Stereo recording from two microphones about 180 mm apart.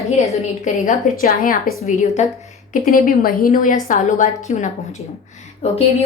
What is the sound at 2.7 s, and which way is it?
A woman's voice, 50° left (ahead or behind).